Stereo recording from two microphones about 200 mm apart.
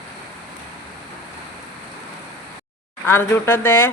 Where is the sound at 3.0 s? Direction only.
10° left (ahead or behind).